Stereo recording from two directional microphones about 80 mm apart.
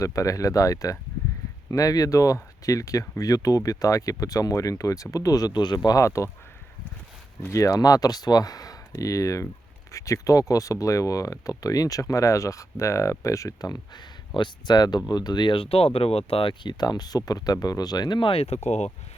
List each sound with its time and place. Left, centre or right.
0.0 s speech: left
6.0 s speech: left
7.5 s speech: left
14.3 s speech: left
16.4 s speech: left